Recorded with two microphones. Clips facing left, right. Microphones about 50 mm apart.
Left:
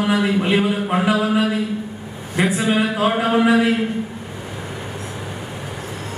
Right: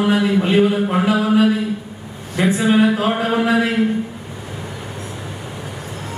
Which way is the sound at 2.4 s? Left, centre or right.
Centre.